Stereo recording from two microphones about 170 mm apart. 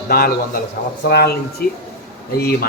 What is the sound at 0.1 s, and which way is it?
A man's voice, 60° left (ahead or behind).